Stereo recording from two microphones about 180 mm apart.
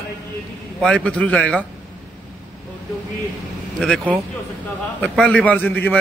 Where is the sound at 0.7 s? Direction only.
5° left (ahead or behind).